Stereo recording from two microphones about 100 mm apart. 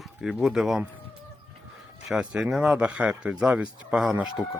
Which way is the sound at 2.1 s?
5° right (ahead or behind).